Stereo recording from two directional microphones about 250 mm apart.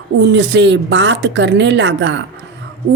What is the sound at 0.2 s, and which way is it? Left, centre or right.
A woman's voice, right.